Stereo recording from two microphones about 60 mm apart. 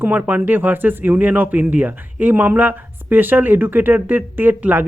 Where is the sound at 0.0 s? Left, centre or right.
Right.